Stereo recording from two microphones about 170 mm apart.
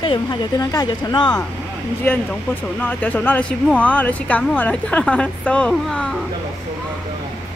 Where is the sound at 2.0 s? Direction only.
10° left (ahead or behind).